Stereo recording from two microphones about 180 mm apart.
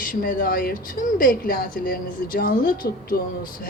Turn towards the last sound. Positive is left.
turn(degrees=50)  # may be behind; listen again after turning